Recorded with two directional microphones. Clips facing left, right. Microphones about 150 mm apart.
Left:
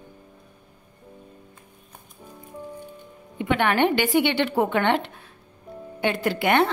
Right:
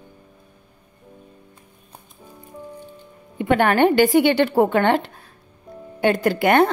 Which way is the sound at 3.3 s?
45° right (ahead or behind).